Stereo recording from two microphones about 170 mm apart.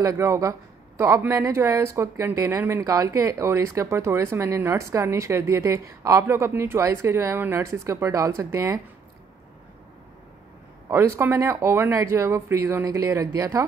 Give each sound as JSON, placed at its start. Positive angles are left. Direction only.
{"t": 0.0, "sound": "speech", "side_deg": -20}
{"t": 10.9, "sound": "speech", "side_deg": -15}